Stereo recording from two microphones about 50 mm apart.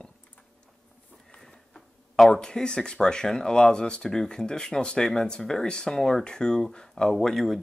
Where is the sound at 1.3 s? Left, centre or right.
Centre.